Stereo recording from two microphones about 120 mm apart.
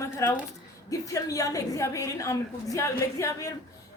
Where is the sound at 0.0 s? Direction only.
25° left (ahead or behind).